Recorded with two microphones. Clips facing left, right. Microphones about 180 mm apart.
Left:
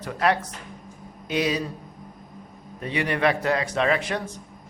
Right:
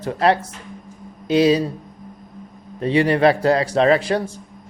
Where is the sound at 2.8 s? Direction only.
30° right (ahead or behind).